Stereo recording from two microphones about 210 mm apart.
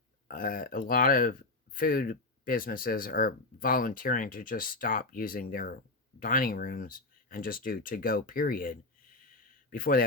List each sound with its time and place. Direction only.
0.3 s speech: 40° left (ahead or behind)